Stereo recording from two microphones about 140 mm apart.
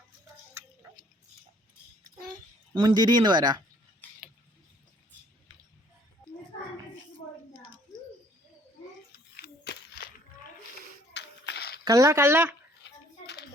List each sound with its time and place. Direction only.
2.7 s speech: 30° right (ahead or behind)
11.9 s speech: 20° right (ahead or behind)